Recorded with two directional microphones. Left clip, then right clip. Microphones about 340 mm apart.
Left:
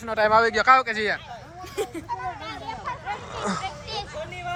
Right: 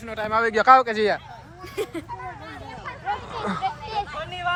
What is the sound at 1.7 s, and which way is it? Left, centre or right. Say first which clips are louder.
Speech: even; centre.